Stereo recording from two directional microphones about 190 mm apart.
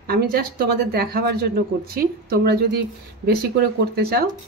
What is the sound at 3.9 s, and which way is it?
Speech, 55° right (ahead or behind).